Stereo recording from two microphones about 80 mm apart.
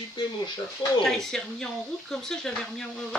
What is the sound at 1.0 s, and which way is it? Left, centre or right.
Speech, centre.